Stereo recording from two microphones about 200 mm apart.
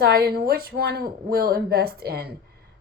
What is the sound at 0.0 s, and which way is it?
Speech, 50° right (ahead or behind).